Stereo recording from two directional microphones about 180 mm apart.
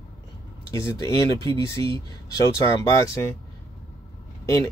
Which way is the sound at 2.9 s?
15° left (ahead or behind).